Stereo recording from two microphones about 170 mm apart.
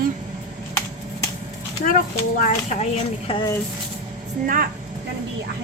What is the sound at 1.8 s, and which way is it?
Speech, 55° left (ahead or behind).